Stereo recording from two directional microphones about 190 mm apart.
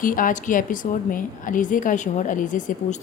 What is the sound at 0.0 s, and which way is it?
Speech, 45° left (ahead or behind).